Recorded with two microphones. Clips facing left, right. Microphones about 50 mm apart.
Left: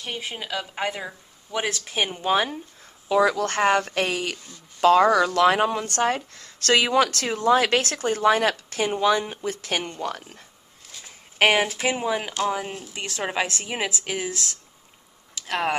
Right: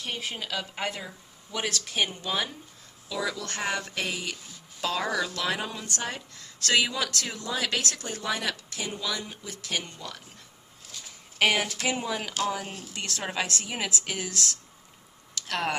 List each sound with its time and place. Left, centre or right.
0.0 s a woman's voice: centre
1.0 s speech: left
3.1 s speech: left
11.3 s a woman's voice: left